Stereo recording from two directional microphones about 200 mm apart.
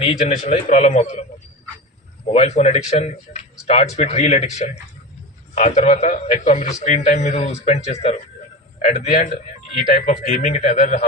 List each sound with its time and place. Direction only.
0.0 s a man's voice: 30° left (ahead or behind)
2.3 s a man's voice: 30° left (ahead or behind)